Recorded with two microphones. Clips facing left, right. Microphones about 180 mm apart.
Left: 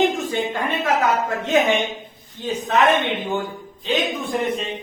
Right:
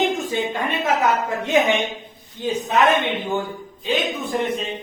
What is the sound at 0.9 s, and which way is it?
A woman's voice, 15° right (ahead or behind).